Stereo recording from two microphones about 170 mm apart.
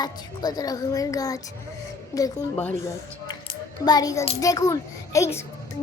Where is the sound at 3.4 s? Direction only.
25° left (ahead or behind).